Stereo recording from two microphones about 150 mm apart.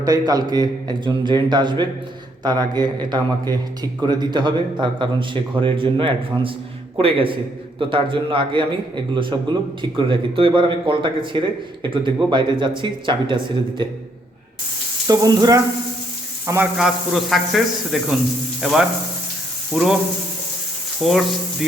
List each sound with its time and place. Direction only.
0.0 s a man's voice: 25° right (ahead or behind)
15.0 s a man's voice: 25° right (ahead or behind)
16.7 s speech: centre (ahead or behind)
21.0 s speech: centre (ahead or behind)